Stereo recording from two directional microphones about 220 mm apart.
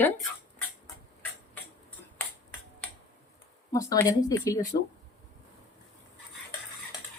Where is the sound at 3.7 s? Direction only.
15° left (ahead or behind).